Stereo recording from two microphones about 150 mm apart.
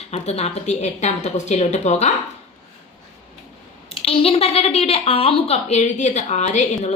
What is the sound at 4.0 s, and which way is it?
A woman's voice, 40° left (ahead or behind).